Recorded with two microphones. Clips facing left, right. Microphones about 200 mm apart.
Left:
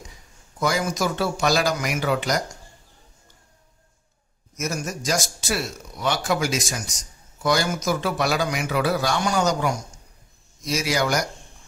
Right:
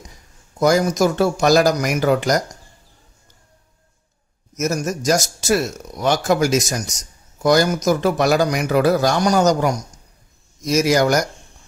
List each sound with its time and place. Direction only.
0.6 s speech: 45° right (ahead or behind)
4.6 s speech: 40° right (ahead or behind)